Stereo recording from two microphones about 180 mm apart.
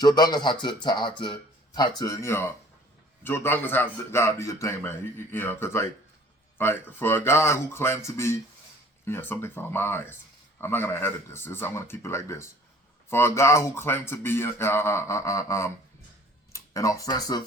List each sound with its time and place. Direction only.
0.0 s a man's voice: 20° left (ahead or behind)